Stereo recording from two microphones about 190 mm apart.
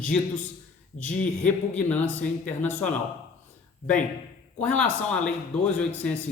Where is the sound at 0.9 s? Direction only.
40° left (ahead or behind).